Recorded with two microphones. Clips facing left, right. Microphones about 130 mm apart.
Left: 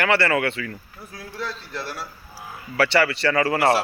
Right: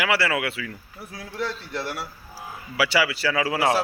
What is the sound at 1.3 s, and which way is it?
Speech, 20° right (ahead or behind).